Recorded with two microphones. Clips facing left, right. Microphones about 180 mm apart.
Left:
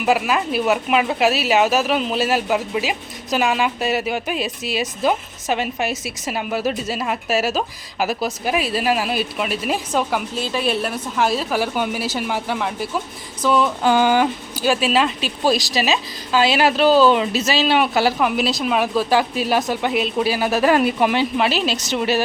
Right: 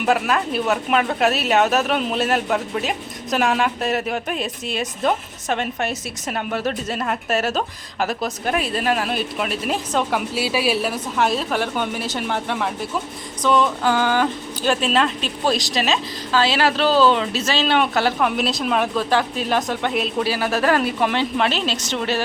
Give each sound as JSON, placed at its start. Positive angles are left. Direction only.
{"t": 0.0, "sound": "speech", "side_deg": 5}
{"t": 13.8, "sound": "a woman's voice", "side_deg": 15}
{"t": 14.7, "sound": "a woman's voice", "side_deg": 5}